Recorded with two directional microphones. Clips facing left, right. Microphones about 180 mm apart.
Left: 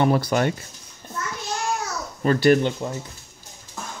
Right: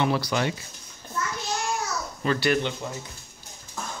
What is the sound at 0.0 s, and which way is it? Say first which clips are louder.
Speech: left 5 dB; 50° left (ahead or behind).